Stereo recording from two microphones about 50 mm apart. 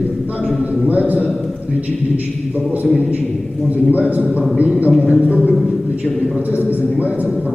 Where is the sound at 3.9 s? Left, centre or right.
Right.